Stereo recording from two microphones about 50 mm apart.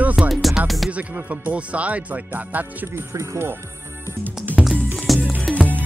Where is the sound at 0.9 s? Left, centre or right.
Right.